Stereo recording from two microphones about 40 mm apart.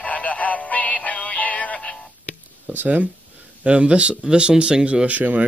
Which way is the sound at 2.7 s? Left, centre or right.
Right.